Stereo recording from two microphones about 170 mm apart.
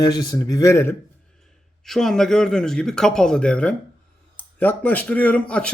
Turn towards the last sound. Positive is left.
turn(degrees=5)  # may be behind; listen again after turning